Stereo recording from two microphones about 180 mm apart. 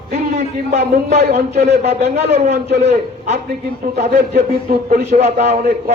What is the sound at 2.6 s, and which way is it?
Speech, 65° right (ahead or behind).